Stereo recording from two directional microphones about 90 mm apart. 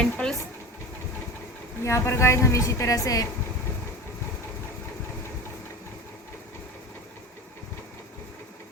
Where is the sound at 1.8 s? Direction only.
30° left (ahead or behind).